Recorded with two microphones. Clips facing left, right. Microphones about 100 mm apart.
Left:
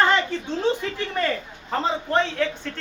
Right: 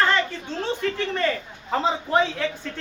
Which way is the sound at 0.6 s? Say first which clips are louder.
Even; 15° left (ahead or behind).